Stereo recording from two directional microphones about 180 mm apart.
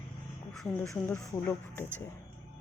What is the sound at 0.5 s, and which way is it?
Speech, centre (ahead or behind).